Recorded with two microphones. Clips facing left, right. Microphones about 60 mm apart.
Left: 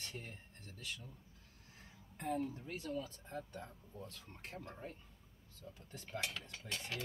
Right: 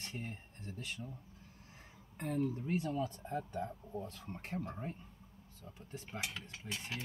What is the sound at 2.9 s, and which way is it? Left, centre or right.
Speech, right.